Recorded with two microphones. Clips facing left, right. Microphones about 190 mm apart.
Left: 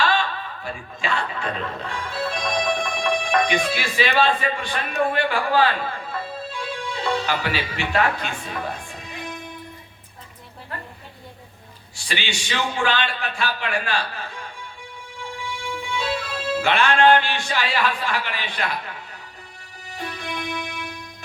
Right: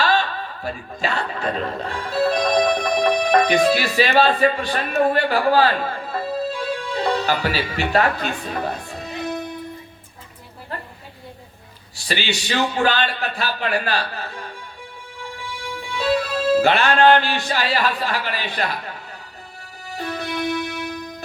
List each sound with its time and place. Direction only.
0.6 s a man's voice: 40° right (ahead or behind)
8.9 s music: 40° right (ahead or behind)
11.9 s a man's voice: 40° right (ahead or behind)
15.2 s music: 35° right (ahead or behind)
20.1 s music: 40° right (ahead or behind)